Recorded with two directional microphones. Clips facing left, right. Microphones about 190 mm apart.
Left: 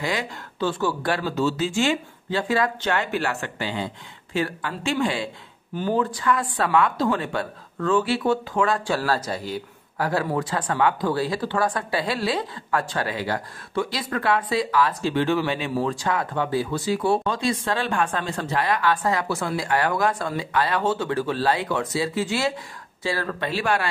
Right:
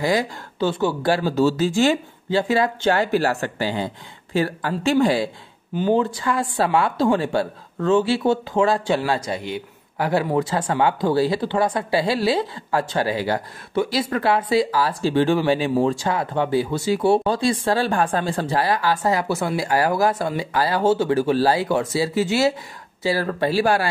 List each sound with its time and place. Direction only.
0.0 s speech: 35° right (ahead or behind)
5.8 s speech: 25° right (ahead or behind)